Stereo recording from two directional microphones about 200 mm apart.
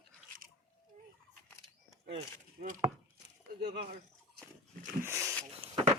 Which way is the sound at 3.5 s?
55° right (ahead or behind).